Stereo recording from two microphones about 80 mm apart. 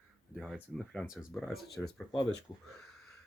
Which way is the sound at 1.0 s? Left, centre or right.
Centre.